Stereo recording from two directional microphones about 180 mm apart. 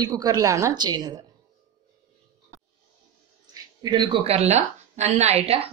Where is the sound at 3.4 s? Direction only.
25° right (ahead or behind).